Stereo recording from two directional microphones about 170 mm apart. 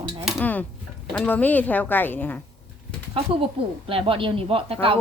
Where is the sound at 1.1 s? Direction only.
10° left (ahead or behind).